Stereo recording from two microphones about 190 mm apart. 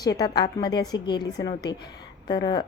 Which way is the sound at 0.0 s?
20° left (ahead or behind).